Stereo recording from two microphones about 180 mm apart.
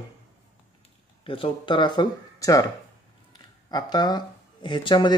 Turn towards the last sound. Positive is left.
turn(degrees=25)  # may be behind; listen again after turning